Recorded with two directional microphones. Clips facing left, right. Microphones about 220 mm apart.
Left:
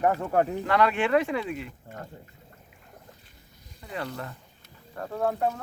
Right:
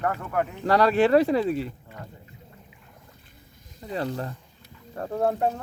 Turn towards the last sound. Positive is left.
turn(degrees=-30)  # may be behind; listen again after turning